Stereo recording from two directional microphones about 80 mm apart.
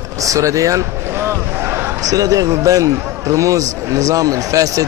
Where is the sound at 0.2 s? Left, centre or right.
Right.